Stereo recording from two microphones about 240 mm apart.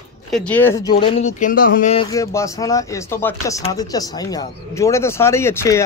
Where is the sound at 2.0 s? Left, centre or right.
Centre.